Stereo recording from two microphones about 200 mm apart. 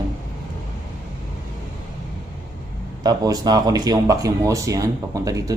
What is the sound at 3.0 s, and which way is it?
A man's voice, 20° right (ahead or behind).